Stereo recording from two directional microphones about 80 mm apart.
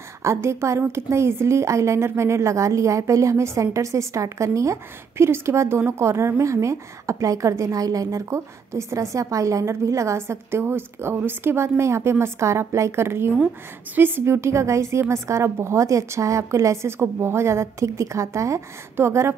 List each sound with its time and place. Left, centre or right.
0.2 s a woman's voice: right